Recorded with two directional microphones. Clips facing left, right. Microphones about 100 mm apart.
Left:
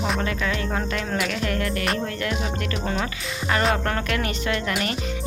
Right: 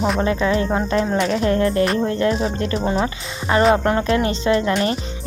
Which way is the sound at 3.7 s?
25° right (ahead or behind).